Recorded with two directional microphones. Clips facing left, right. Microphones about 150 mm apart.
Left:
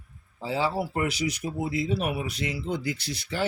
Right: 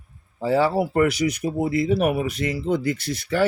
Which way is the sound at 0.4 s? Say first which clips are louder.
Right 8 dB; 55° right (ahead or behind).